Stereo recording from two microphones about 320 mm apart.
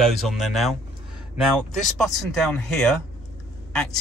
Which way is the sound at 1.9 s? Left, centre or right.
Centre.